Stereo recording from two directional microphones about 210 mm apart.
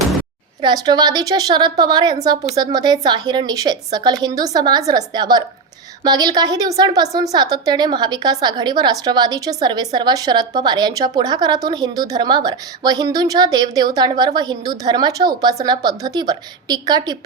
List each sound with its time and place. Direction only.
0.6 s a woman's voice: 20° right (ahead or behind)